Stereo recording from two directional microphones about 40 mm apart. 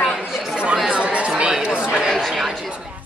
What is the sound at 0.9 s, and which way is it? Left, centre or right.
Chatter, right.